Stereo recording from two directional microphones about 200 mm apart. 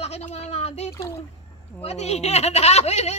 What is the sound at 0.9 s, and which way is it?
Speech, 15° left (ahead or behind).